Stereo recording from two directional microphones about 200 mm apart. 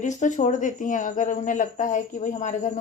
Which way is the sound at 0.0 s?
40° left (ahead or behind).